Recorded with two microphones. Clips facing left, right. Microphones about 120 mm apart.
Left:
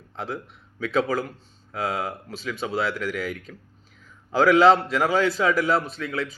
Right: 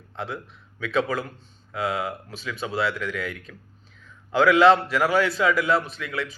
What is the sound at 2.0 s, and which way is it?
A man's voice, 35° left (ahead or behind).